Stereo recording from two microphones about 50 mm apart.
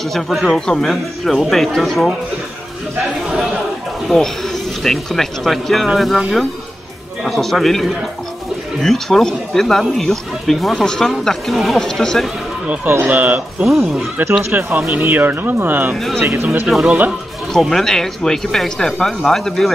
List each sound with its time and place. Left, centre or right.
0.1 s speech: centre
4.1 s speech: centre
13.1 s speech: right
13.6 s speech: centre
14.5 s speech: right
16.2 s speech: right
16.6 s speech: centre
17.5 s speech: centre